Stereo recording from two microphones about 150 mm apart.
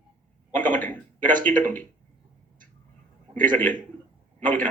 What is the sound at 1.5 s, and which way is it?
Speech, 60° right (ahead or behind).